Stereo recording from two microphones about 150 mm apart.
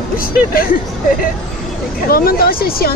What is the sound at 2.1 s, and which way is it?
Speech, 85° left.